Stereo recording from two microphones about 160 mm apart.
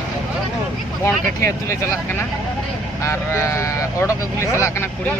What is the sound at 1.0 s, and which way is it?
Speech, 15° left (ahead or behind).